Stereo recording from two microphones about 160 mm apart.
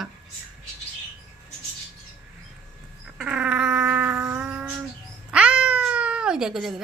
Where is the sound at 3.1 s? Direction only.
5° right (ahead or behind).